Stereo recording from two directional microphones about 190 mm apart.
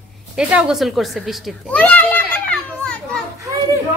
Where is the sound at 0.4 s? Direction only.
5° right (ahead or behind).